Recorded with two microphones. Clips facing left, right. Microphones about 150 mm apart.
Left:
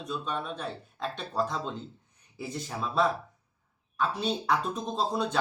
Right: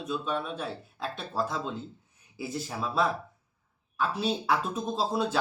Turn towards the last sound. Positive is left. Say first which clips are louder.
# right 1 dB
turn(degrees=-5)  # may be behind; listen again after turning